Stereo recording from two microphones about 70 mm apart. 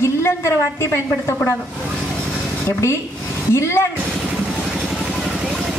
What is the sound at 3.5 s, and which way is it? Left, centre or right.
Speech, left.